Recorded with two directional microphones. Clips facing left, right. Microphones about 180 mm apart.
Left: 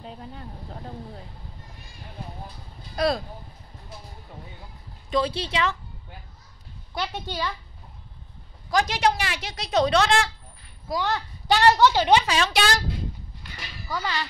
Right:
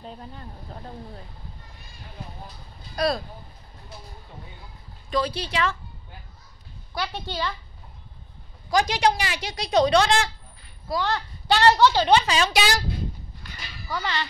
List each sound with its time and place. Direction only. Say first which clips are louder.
5.1 s speech: left 1 dB; 25° left (ahead or behind)
7.0 s a woman's voice: even; 15° left (ahead or behind)
8.6 s speech: right 1 dB; centre (ahead or behind)
10.9 s a woman's voice: even; 15° left (ahead or behind)
12.3 s speech: right 1 dB; centre (ahead or behind)
13.8 s a woman's voice: even; 10° left (ahead or behind)